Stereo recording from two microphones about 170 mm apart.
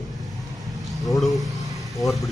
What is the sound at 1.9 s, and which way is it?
Speech, centre (ahead or behind).